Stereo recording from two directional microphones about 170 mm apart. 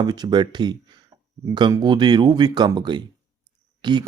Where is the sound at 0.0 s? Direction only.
25° right (ahead or behind).